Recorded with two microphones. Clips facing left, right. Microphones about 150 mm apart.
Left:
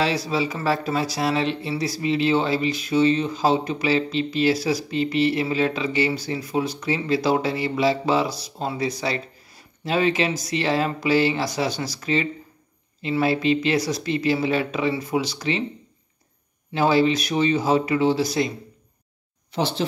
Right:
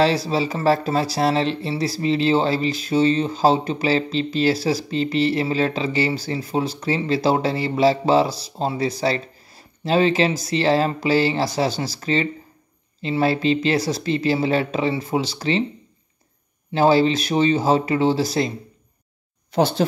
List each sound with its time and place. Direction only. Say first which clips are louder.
0.0 s speech: right 4 dB; 30° right (ahead or behind)
16.7 s speech: right 3 dB; 30° right (ahead or behind)
19.5 s speech: right 5 dB; 45° right (ahead or behind)